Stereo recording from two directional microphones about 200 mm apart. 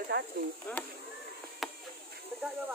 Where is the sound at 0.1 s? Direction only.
55° right (ahead or behind).